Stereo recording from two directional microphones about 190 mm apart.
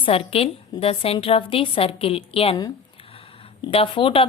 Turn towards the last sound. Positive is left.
turn(degrees=25)  # may be behind; listen again after turning